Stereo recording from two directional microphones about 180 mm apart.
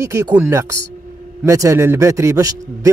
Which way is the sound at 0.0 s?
15° right (ahead or behind).